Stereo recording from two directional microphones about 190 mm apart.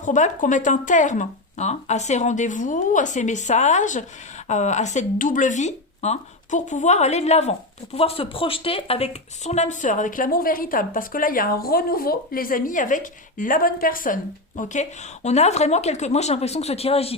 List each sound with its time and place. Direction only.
0.0 s speech: 40° left (ahead or behind)